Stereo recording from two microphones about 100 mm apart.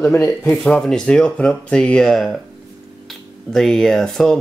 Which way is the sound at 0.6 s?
5° left (ahead or behind).